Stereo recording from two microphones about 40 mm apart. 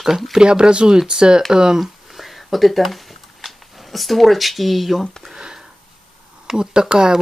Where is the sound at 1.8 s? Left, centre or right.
Centre.